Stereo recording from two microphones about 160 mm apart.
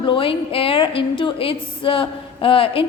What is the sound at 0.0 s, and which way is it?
A woman's voice, 35° left (ahead or behind).